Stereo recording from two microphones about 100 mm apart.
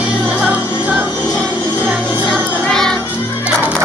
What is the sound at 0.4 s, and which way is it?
Music, 15° right (ahead or behind).